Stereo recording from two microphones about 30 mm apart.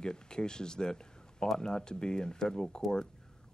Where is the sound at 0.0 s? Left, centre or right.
Left.